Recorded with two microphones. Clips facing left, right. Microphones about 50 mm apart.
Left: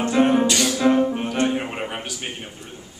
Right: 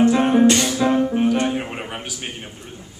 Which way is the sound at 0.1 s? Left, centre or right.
Centre.